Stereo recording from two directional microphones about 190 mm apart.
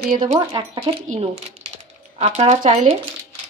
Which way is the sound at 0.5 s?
30° right (ahead or behind).